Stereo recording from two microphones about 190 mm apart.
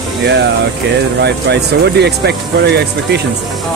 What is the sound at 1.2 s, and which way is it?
Speech, 60° right (ahead or behind).